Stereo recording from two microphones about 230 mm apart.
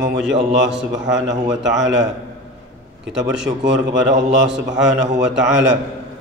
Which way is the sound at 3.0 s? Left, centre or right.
Centre.